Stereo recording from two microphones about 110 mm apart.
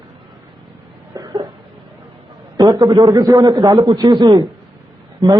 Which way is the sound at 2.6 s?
30° right (ahead or behind).